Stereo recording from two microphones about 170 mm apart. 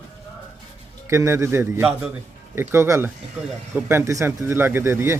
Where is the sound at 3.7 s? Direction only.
15° right (ahead or behind).